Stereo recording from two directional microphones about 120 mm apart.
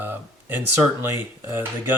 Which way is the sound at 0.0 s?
15° right (ahead or behind).